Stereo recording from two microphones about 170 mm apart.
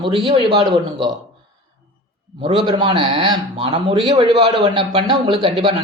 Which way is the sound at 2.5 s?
30° right (ahead or behind).